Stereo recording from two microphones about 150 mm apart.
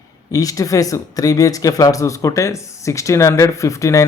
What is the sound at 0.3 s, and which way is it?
Speech, 20° left (ahead or behind).